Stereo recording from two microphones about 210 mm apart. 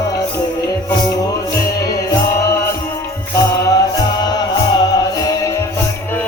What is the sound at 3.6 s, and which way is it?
Music, 20° left (ahead or behind).